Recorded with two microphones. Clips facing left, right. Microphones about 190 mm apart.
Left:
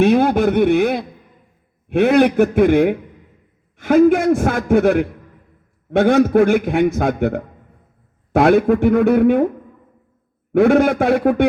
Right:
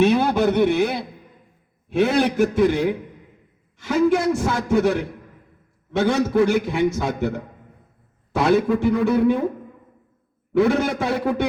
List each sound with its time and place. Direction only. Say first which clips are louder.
0.0 s a sound: left 4 dB; 55° left (ahead or behind)
1.9 s a man's voice: left 6 dB; 60° left (ahead or behind)
10.5 s a man's voice: left 6 dB; 55° left (ahead or behind)